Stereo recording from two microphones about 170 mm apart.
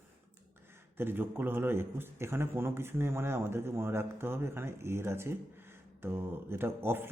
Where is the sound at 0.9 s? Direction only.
15° right (ahead or behind).